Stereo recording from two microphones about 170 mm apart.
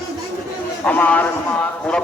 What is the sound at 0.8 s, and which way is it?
Speech, 10° left (ahead or behind).